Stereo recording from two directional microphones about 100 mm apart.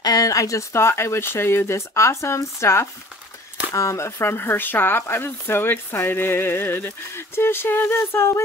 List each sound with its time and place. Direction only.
0.0 s speech: 40° left (ahead or behind)